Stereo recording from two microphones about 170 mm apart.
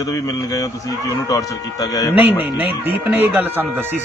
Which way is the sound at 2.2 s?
10° right (ahead or behind).